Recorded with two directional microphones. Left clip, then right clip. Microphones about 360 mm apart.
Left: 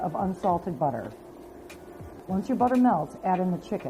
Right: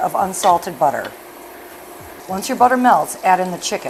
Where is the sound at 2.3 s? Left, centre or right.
Centre.